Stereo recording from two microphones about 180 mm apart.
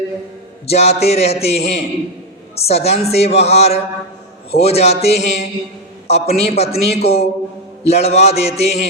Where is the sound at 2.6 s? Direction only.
35° left (ahead or behind).